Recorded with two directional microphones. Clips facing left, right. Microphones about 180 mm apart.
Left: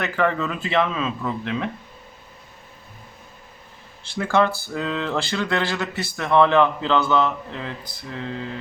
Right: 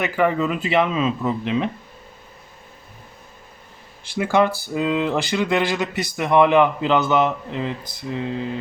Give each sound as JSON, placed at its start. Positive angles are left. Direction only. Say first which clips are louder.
{"t": 0.0, "sound": "speech", "louder": "right 3 dB", "side_deg": -15}
{"t": 4.0, "sound": "speech", "louder": "right 2 dB", "side_deg": -15}